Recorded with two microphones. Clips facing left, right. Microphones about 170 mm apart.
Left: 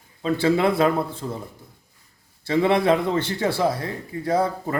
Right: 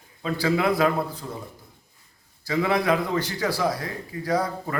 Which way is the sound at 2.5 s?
25° left (ahead or behind).